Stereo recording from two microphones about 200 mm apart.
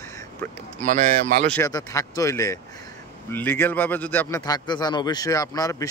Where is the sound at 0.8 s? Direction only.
40° right (ahead or behind).